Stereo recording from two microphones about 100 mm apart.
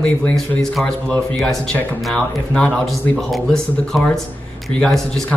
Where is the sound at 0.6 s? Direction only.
5° left (ahead or behind).